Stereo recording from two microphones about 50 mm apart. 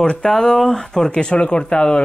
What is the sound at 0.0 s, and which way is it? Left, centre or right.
Speech, centre.